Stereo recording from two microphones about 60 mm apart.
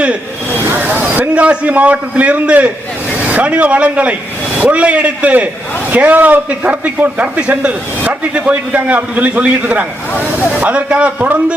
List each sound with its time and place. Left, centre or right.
0.8 s a man's voice: right